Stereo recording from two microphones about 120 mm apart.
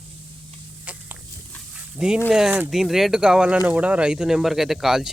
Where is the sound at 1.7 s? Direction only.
5° right (ahead or behind).